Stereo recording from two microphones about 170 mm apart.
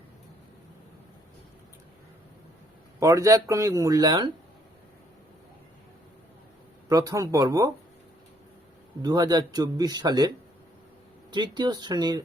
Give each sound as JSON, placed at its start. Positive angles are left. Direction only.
{"t": 3.0, "sound": "speech", "side_deg": -20}
{"t": 6.8, "sound": "speech", "side_deg": -20}
{"t": 9.0, "sound": "speech", "side_deg": -25}